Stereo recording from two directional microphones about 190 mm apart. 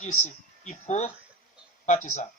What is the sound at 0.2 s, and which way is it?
Speech, 40° left (ahead or behind).